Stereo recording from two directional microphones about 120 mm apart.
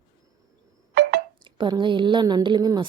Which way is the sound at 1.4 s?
40° right (ahead or behind).